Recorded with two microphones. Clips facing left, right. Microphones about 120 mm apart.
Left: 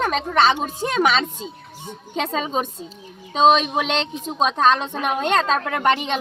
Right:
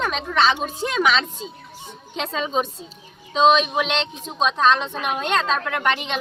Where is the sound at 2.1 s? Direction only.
45° left (ahead or behind).